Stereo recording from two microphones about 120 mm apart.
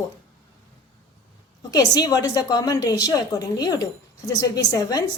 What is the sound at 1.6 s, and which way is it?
A woman's voice, 30° left (ahead or behind).